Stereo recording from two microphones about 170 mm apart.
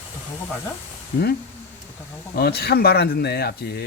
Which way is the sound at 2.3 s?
70° left (ahead or behind).